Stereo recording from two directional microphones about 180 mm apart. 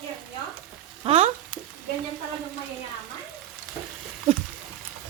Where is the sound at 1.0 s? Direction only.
30° right (ahead or behind).